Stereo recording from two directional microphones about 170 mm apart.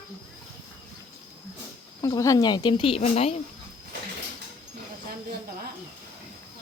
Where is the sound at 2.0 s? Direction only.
20° left (ahead or behind); by 3.3 s 35° left (ahead or behind).